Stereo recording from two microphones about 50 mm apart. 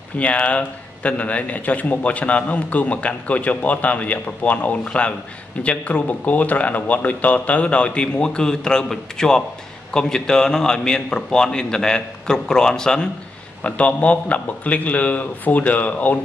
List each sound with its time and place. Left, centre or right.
0.2 s a man's voice: left
13.6 s a man's voice: left